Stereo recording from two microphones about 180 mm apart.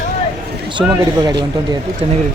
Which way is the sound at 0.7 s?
25° right (ahead or behind).